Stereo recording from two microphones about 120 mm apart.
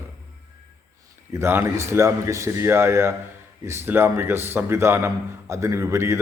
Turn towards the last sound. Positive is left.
turn(degrees=-25)  # may be behind; listen again after turning